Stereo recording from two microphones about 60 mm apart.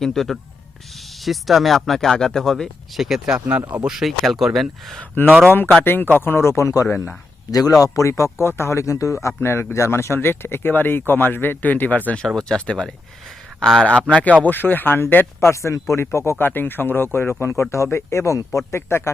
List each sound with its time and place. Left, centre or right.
0.0 s speech: centre
5.2 s speech: left
7.9 s speech: left
12.4 s speech: centre
13.8 s speech: left
15.4 s speech: left
16.5 s speech: left
17.4 s speech: left